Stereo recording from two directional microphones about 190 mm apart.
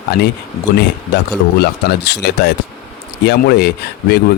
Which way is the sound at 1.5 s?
60° left (ahead or behind).